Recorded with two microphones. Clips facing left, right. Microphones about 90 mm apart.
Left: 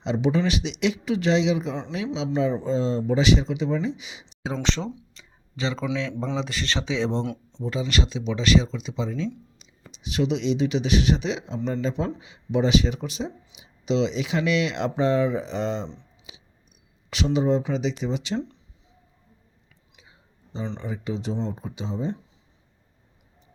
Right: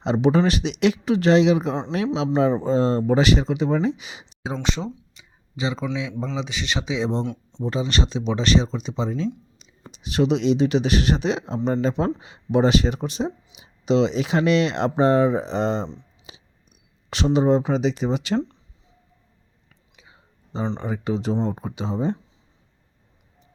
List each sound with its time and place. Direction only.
0.0 s speech: 50° right (ahead or behind)
4.4 s speech: 15° right (ahead or behind)
6.3 s speech: centre (ahead or behind)
7.6 s speech: 35° right (ahead or behind)
16.3 s a sound: 40° right (ahead or behind)
17.1 s speech: 40° right (ahead or behind)
20.0 s whispering: 65° right (ahead or behind)
20.7 s speech: 60° right (ahead or behind)